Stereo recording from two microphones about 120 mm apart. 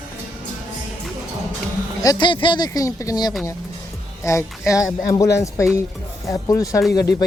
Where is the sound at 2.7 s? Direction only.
25° left (ahead or behind).